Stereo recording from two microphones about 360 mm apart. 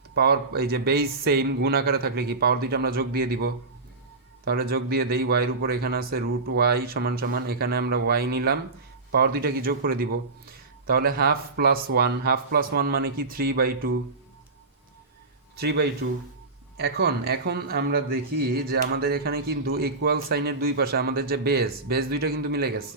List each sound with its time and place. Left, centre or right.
0.1 s speech: right
15.5 s speech: right